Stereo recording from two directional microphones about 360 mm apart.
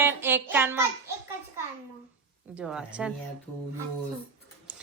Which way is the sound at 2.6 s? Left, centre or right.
Centre.